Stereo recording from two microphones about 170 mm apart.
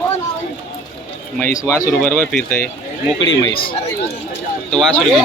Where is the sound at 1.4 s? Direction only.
15° left (ahead or behind).